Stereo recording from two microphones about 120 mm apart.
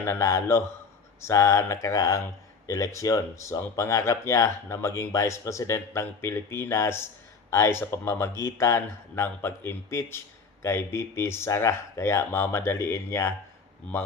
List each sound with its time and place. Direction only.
0.0 s speech: 25° left (ahead or behind)